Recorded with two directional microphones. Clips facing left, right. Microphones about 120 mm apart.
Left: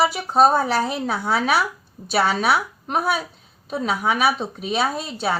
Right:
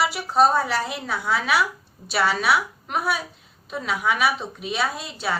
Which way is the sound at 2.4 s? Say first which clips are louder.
Left 2 dB; 45° left (ahead or behind).